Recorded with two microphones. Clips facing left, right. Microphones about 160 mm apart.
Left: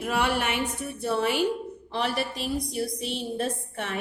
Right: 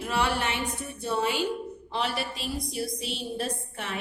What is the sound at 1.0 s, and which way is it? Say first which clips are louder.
Speech: left 2 dB; 60° left (ahead or behind).